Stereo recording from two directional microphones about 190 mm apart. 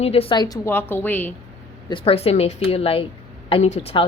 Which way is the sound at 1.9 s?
30° left (ahead or behind).